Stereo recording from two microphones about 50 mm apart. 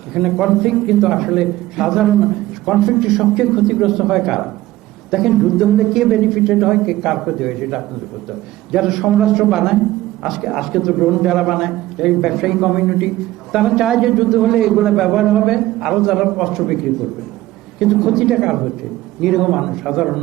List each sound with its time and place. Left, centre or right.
0.1 s a man's voice: centre